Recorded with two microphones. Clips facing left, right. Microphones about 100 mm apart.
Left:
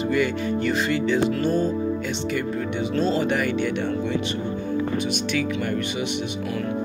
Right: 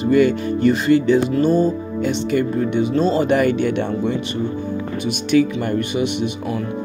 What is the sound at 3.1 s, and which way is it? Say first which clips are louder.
Speech: right 6 dB; 50° right (ahead or behind).